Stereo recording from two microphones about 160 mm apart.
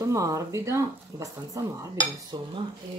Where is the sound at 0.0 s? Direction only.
20° right (ahead or behind).